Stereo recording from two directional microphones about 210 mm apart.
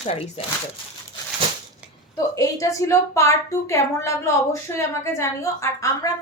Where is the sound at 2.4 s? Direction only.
15° left (ahead or behind).